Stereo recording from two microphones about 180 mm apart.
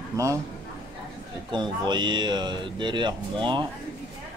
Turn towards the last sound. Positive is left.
turn(degrees=-25)  # may be behind; listen again after turning